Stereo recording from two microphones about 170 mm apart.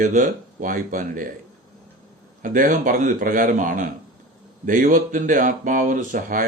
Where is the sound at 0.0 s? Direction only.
50° right (ahead or behind).